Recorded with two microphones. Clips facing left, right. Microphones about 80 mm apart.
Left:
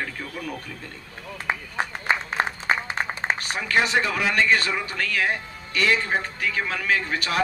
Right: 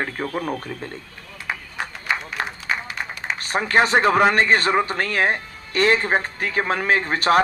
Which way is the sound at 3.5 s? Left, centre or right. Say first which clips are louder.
Right 6 dB; right.